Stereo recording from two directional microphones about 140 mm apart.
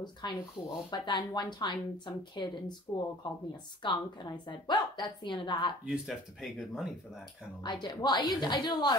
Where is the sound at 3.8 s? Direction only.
35° left (ahead or behind).